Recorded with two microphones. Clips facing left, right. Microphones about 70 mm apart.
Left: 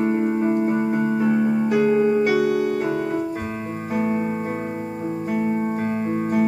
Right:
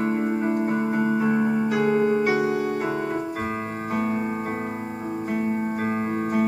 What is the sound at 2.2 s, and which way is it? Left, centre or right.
Music, centre.